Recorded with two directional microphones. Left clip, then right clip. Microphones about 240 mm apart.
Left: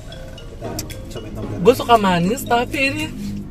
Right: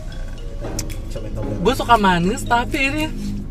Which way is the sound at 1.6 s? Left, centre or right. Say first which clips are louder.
Left 2 dB; centre.